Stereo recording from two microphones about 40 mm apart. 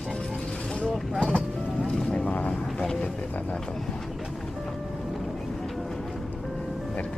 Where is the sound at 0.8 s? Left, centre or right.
Left.